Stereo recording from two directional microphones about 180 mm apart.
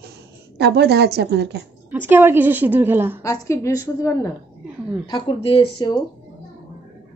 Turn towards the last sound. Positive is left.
turn(degrees=25)  # may be behind; listen again after turning